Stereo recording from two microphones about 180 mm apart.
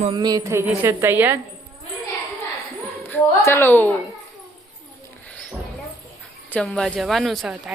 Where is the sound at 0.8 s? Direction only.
10° right (ahead or behind).